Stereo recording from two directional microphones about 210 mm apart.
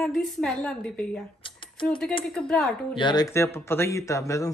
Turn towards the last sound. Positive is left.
turn(degrees=15)  # may be behind; listen again after turning